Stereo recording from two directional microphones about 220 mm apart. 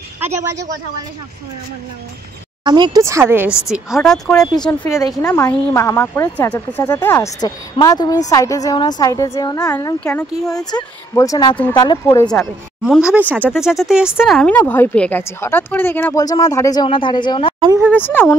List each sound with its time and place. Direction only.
0.4 s speech: 15° right (ahead or behind)
2.6 s speech: 20° right (ahead or behind); by 17.6 s 20° left (ahead or behind)
17.9 s speech: 10° left (ahead or behind)